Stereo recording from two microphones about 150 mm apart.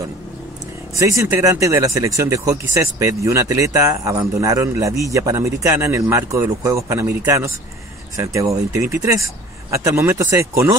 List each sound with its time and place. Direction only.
0.9 s speech: 20° right (ahead or behind)